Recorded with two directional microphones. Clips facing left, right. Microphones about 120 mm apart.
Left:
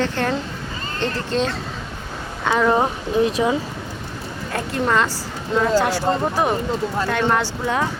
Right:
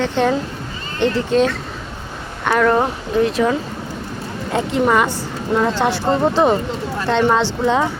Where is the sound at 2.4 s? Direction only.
10° left (ahead or behind).